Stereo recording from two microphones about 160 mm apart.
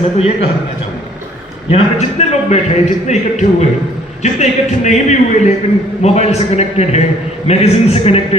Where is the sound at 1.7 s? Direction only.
45° left (ahead or behind).